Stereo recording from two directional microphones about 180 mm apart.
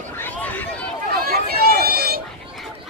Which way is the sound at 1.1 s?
60° right (ahead or behind).